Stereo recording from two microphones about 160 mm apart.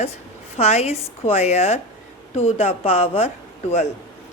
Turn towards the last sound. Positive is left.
turn(degrees=40)  # may be behind; listen again after turning